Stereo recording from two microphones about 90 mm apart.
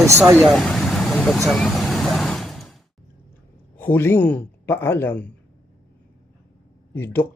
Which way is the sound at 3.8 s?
25° left (ahead or behind).